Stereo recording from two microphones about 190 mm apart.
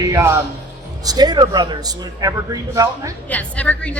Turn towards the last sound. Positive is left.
turn(degrees=5)  # may be behind; listen again after turning